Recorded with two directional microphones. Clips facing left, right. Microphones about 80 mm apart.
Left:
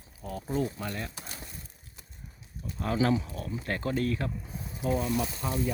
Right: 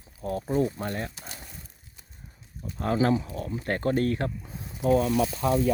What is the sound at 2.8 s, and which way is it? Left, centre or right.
Speech, right.